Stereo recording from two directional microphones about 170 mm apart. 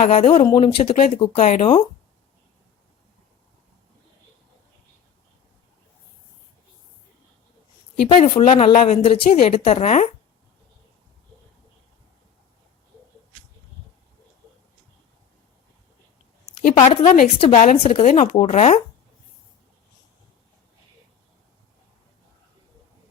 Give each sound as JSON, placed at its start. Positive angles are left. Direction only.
{"t": 0.0, "sound": "speech", "side_deg": 40}
{"t": 8.0, "sound": "speech", "side_deg": 35}
{"t": 16.7, "sound": "speech", "side_deg": 40}